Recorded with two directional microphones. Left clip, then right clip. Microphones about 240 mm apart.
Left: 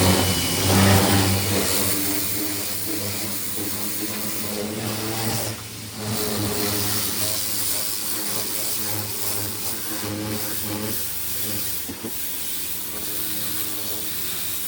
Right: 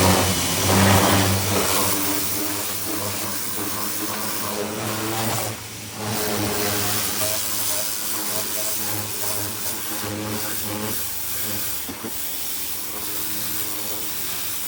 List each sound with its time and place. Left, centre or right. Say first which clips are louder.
0.0 s vehicle: right 2 dB; centre
1.9 s vehicle: right 2 dB; right
6.1 s vehicle: right 2 dB; centre